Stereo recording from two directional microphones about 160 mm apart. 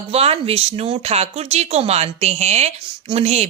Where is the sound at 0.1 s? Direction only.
40° right (ahead or behind).